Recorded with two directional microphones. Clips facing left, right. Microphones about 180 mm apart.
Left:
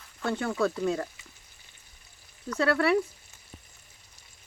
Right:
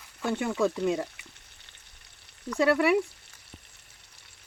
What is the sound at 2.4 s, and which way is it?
Frying, 15° right (ahead or behind).